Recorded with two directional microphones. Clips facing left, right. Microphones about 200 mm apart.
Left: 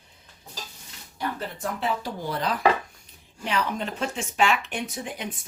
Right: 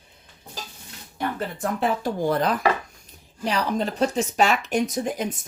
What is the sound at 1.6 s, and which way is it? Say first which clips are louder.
Speech: right 5 dB; 50° right (ahead or behind).